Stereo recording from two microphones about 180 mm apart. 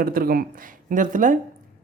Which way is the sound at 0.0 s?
55° right (ahead or behind).